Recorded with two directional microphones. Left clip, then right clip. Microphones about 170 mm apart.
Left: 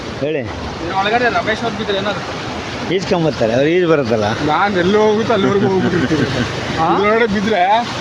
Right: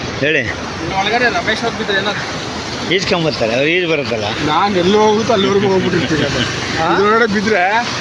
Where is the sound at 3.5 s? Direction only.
35° left (ahead or behind).